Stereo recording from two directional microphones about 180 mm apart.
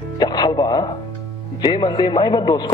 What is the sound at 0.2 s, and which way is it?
Music, 20° left (ahead or behind).